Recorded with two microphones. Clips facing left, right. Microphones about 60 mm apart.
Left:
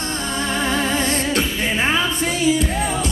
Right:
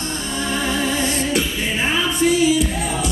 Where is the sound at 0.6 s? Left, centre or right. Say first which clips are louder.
Left 1 dB; left.